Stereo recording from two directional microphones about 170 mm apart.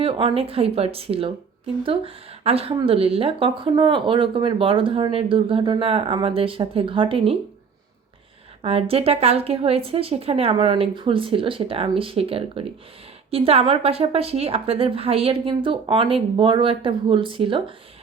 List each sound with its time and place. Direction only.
0.0 s speech: 30° right (ahead or behind)
8.6 s speech: 35° right (ahead or behind)